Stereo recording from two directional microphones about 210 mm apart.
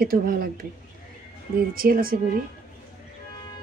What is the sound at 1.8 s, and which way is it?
Speech, 45° right (ahead or behind).